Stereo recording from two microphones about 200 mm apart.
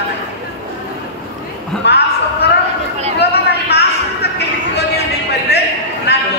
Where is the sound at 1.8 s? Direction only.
55° left (ahead or behind).